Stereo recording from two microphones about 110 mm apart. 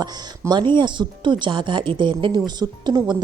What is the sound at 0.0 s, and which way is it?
A woman's voice, 40° right (ahead or behind).